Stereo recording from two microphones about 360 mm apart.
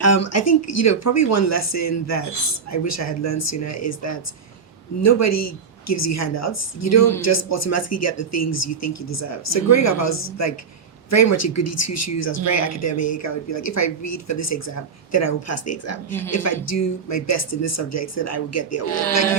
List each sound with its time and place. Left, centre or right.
0.0 s a woman's voice: left